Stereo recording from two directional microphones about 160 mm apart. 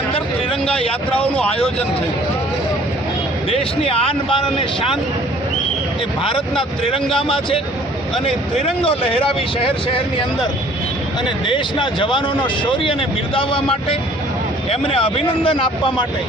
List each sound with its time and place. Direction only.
3.8 s speech: 35° left (ahead or behind)
6.2 s speech: 30° left (ahead or behind)
11.4 s speech: 30° left (ahead or behind)